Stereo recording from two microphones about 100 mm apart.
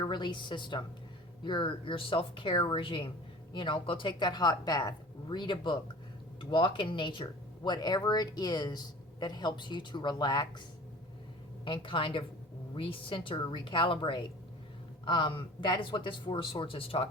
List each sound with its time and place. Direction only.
0.0 s speech: 50° left (ahead or behind)
11.6 s speech: 55° left (ahead or behind)